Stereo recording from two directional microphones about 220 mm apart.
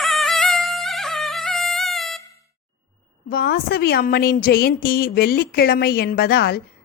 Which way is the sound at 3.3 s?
45° left (ahead or behind).